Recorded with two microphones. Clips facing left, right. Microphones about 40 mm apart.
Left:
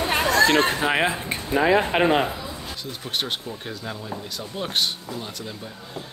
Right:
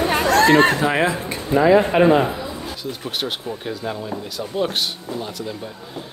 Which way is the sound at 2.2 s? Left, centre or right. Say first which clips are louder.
Right 4 dB; centre.